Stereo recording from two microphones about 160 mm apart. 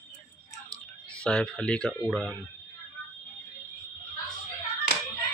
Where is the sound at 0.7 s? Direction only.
5° left (ahead or behind).